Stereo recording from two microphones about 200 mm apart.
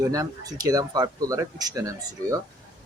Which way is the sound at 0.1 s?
15° right (ahead or behind).